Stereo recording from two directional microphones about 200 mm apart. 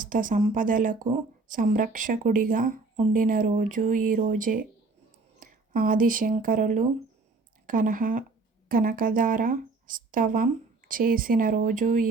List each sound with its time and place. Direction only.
0.0 s speech: 40° right (ahead or behind)